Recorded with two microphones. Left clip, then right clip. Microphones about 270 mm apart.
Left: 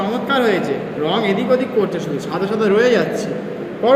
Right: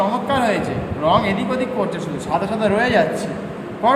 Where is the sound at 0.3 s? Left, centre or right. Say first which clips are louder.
Left 6 dB; centre.